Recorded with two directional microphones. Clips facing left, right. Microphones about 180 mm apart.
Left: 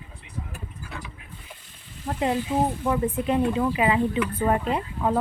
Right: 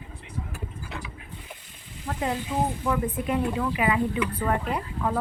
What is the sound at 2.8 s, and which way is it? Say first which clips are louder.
Speech: left 3 dB; 25° left (ahead or behind).